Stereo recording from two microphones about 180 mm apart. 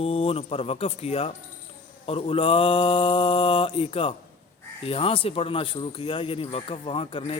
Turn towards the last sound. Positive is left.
turn(degrees=30)  # may be behind; listen again after turning